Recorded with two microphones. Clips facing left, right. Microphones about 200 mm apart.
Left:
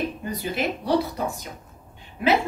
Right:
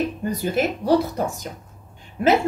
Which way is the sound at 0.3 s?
45° right (ahead or behind).